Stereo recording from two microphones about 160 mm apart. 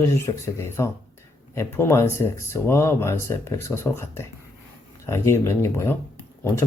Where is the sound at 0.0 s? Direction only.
15° left (ahead or behind).